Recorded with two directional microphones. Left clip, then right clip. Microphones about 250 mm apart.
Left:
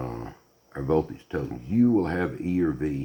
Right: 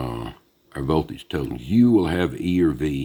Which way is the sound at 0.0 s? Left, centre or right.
Right.